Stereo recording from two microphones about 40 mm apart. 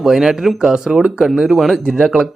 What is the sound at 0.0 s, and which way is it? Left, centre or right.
Speech, centre.